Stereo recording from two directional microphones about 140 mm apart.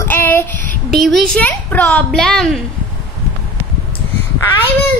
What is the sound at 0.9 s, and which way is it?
A child's voice, centre (ahead or behind).